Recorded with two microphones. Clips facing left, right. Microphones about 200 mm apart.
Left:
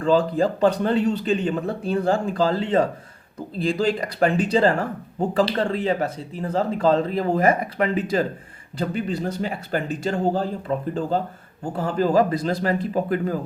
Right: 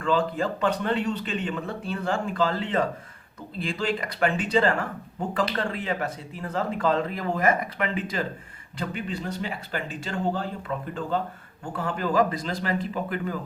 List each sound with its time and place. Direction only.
0.0 s speech: 35° left (ahead or behind)